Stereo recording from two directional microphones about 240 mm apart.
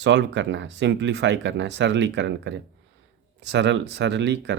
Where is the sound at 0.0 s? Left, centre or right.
Right.